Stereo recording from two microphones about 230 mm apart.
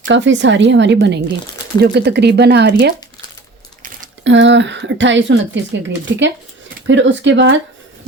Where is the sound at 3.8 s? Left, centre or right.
Right.